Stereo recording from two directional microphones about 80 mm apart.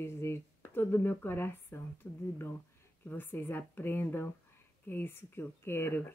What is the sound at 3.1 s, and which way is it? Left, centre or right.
Speech, left.